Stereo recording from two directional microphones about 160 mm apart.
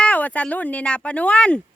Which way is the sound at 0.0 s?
10° left (ahead or behind).